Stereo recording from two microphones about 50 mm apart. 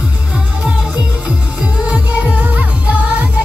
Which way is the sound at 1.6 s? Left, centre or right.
Right.